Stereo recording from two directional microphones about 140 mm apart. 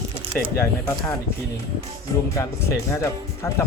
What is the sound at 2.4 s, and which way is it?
Speech, 20° left (ahead or behind).